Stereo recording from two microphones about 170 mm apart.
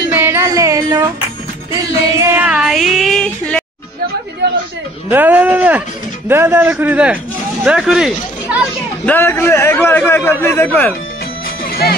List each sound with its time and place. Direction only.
0.1 s a sound: 10° right (ahead or behind)
2.1 s female singing: 15° right (ahead or behind); by 3.6 s 5° left (ahead or behind)
4.4 s a sound: 80° right
5.1 s speech: 10° right (ahead or behind)
9.0 s a man's voice: 10° left (ahead or behind)
11.6 s music: 60° left (ahead or behind)